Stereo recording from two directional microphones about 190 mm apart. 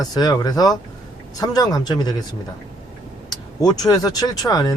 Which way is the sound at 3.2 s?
20° left (ahead or behind).